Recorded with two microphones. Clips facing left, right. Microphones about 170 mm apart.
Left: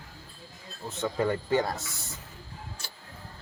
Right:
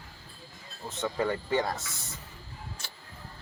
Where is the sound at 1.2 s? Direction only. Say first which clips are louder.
Left 2 dB; 35° left (ahead or behind).